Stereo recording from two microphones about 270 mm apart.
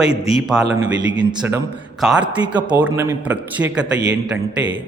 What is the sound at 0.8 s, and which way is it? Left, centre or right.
Speech, centre.